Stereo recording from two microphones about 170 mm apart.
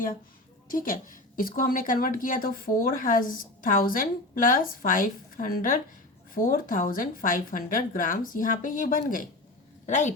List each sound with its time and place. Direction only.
0.7 s a woman's voice: 55° left (ahead or behind)